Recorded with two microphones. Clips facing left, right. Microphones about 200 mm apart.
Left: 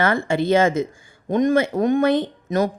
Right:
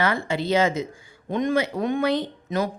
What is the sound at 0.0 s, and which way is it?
A woman's voice, 50° left (ahead or behind).